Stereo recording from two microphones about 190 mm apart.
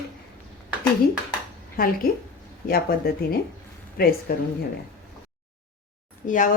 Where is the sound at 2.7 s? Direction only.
50° left (ahead or behind).